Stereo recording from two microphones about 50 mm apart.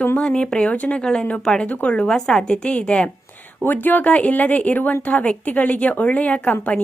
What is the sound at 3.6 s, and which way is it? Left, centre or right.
Speech, left.